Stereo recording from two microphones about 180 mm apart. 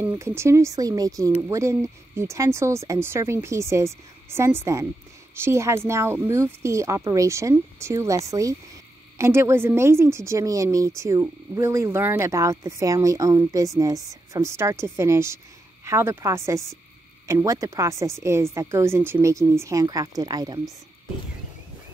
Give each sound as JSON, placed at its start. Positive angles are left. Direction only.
{"t": 0.1, "sound": "speech", "side_deg": -15}